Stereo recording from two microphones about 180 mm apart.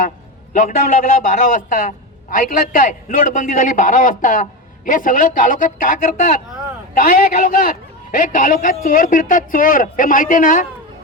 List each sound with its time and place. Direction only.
0.5 s a man's voice: 45° left (ahead or behind)